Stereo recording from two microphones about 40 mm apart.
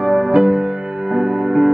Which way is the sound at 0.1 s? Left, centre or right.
Centre.